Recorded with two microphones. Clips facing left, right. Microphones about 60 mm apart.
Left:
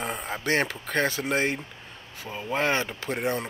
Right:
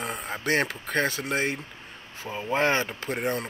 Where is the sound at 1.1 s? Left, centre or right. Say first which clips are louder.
Left 2 dB; centre.